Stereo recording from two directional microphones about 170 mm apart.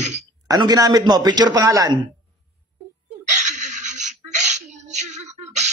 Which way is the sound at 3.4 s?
45° right (ahead or behind).